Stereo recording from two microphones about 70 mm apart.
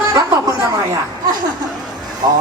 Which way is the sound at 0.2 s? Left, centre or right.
Right.